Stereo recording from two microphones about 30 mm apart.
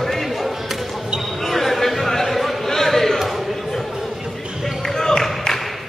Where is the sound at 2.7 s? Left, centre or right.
Centre.